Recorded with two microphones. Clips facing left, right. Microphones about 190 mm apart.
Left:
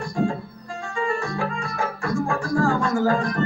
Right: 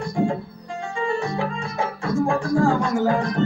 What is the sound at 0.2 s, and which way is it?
Music, 20° right (ahead or behind).